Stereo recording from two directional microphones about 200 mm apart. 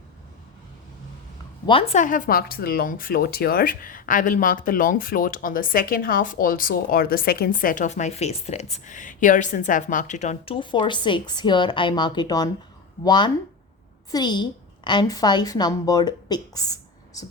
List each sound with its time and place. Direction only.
1.6 s a woman's voice: 25° left (ahead or behind)